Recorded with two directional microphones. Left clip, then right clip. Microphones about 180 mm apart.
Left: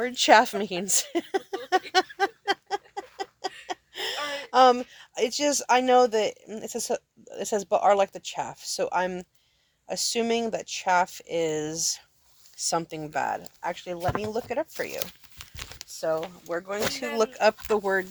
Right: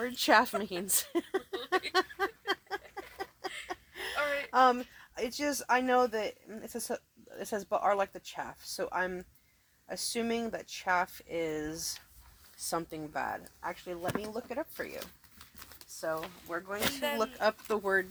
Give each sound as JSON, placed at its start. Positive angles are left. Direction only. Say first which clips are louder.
{"t": 0.0, "sound": "speech", "louder": "left 7 dB", "side_deg": 35}
{"t": 1.9, "sound": "a sound", "louder": "left 7 dB", "side_deg": 35}
{"t": 9.8, "sound": "speech", "louder": "left 8 dB", "side_deg": 45}
{"t": 14.9, "sound": "speech", "louder": "left 9 dB", "side_deg": 70}
{"t": 17.7, "sound": "speech", "louder": "left 4 dB", "side_deg": 35}